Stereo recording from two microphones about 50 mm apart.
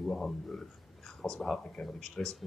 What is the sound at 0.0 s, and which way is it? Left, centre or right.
Speech, centre.